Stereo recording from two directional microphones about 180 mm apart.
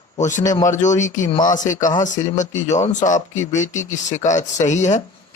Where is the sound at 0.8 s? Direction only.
45° left (ahead or behind).